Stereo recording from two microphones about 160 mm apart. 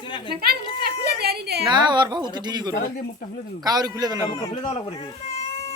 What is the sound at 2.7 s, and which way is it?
Speech, 65° left (ahead or behind).